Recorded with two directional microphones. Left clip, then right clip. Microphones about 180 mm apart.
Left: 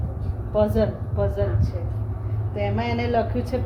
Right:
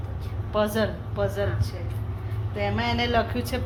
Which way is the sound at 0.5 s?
5° right (ahead or behind).